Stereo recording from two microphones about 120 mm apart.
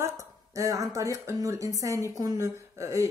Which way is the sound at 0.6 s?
25° right (ahead or behind).